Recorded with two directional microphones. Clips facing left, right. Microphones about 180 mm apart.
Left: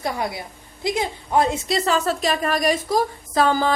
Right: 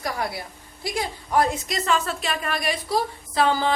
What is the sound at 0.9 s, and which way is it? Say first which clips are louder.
A woman's voice: left 4 dB; 20° left (ahead or behind).